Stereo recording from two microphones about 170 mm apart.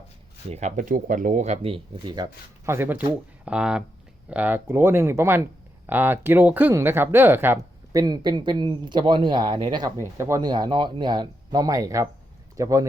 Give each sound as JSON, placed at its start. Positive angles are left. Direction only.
{"t": 0.5, "sound": "speech", "side_deg": -45}